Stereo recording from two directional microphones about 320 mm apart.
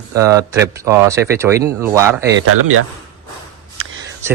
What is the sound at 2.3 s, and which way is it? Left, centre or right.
Speech, right.